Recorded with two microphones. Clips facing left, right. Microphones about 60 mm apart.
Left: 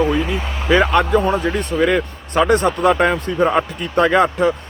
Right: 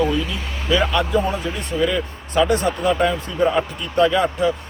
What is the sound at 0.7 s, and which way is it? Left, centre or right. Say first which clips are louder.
Speech: left 5 dB; left.